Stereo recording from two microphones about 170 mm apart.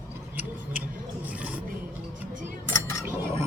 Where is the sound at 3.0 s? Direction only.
15° right (ahead or behind).